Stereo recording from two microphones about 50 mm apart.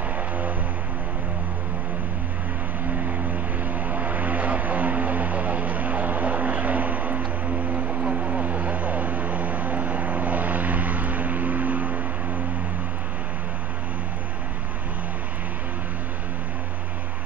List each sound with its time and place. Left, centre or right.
3.8 s aircraft: right
7.7 s vehicle: right